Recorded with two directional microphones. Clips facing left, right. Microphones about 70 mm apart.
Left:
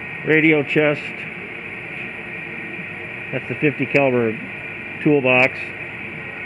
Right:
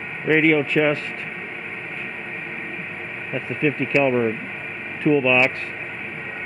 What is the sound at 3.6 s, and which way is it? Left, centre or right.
Speech, centre.